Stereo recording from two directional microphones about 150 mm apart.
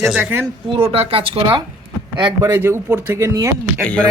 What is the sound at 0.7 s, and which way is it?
Speech, 40° right (ahead or behind).